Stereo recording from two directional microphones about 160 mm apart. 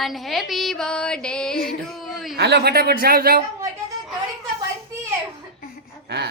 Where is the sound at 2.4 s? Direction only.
90° right; by 3.4 s 70° right (ahead or behind).